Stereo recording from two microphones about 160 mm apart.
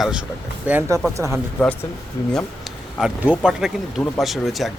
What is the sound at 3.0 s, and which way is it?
A man's voice, 5° right (ahead or behind).